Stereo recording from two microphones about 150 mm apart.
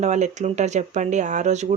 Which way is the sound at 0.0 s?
50° right (ahead or behind).